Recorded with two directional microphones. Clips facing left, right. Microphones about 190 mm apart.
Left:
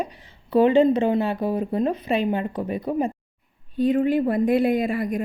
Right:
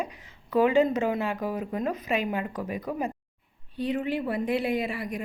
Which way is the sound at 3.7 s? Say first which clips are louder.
Left 8 dB; 50° left (ahead or behind).